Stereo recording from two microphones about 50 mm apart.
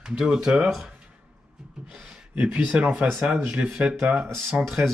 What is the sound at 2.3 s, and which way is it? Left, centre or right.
Speech, right.